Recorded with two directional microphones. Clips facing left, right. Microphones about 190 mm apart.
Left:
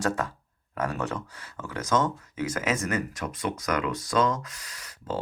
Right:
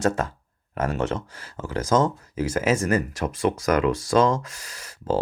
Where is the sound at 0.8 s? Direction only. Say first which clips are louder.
Right 5 dB; 25° right (ahead or behind).